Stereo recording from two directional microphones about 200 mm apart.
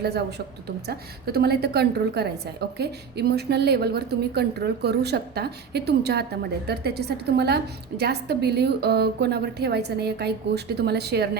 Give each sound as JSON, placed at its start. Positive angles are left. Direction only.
{"t": 0.0, "sound": "a woman's voice", "side_deg": -55}